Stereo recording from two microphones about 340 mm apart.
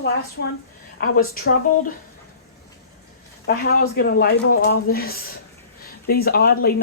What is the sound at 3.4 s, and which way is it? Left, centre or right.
Speech, left.